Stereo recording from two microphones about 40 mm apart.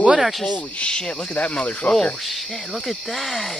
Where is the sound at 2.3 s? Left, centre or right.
Centre.